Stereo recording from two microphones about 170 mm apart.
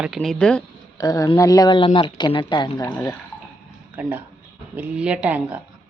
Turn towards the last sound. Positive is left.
turn(degrees=-10)  # may be behind; listen again after turning